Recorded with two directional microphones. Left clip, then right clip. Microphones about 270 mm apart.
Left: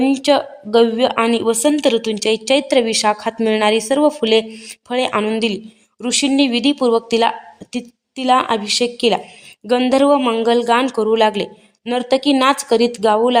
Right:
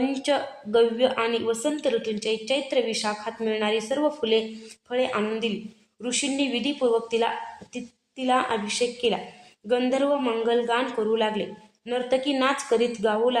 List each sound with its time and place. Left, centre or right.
0.0 s speech: left